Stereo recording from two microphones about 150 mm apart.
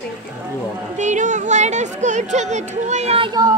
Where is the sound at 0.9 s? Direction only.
55° right (ahead or behind); by 3.5 s 30° right (ahead or behind).